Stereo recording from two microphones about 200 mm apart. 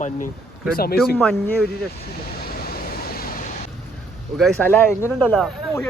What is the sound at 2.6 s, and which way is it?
Vehicle, 50° left (ahead or behind).